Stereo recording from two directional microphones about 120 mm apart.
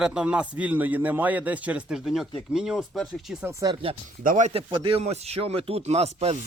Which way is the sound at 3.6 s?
45° right (ahead or behind).